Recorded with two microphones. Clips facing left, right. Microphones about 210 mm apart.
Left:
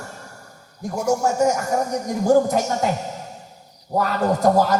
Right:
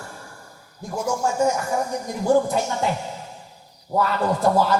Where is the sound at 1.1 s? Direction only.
40° left (ahead or behind).